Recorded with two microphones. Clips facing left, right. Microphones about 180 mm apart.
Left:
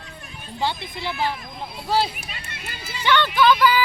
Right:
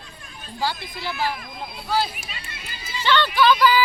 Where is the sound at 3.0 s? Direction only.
15° left (ahead or behind).